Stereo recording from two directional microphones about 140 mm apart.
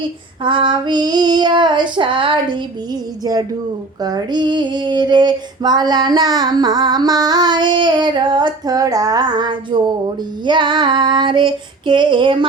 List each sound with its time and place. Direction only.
0.4 s female singing: 35° right (ahead or behind)